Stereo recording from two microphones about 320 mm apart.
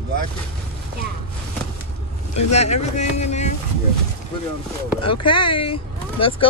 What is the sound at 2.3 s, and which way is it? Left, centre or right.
Speech, centre.